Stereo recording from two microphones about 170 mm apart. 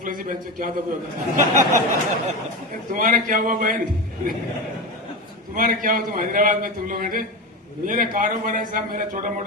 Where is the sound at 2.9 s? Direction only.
50° right (ahead or behind).